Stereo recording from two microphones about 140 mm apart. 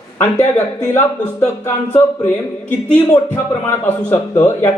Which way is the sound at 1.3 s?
20° left (ahead or behind).